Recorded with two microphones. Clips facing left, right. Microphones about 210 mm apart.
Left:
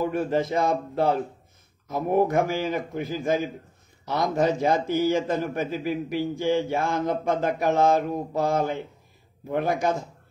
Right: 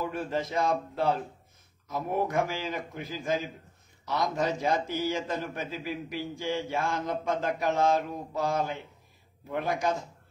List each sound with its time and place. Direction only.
0.0 s a man's voice: 50° left (ahead or behind)